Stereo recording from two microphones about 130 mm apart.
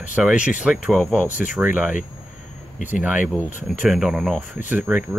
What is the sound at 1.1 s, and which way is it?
Speech, 10° right (ahead or behind).